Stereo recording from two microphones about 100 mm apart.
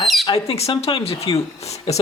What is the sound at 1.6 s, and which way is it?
Speech, 90° left.